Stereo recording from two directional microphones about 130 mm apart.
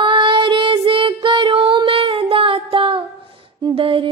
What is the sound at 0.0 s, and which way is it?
Music, 40° right (ahead or behind).